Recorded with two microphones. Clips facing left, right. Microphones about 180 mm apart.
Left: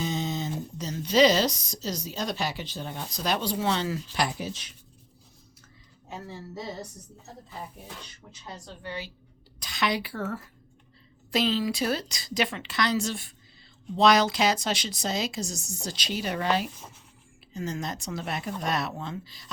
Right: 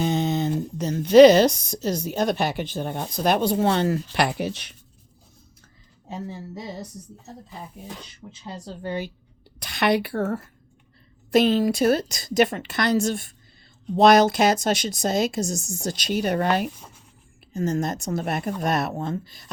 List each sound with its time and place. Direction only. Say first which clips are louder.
0.0 s speech: right 7 dB; 60° right (ahead or behind)
6.1 s speech: right 5 dB; 20° right (ahead or behind)
8.3 s speech: right 7 dB; 30° right (ahead or behind); by 9.1 s 50° right (ahead or behind)
9.6 s speech: right 7 dB; 60° right (ahead or behind)